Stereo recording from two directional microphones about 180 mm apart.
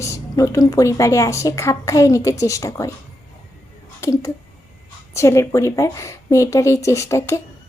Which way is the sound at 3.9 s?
15° left (ahead or behind).